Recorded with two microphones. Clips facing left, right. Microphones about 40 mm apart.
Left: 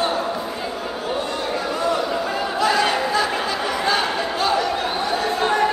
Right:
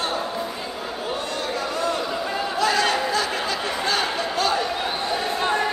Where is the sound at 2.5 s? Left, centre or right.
Centre.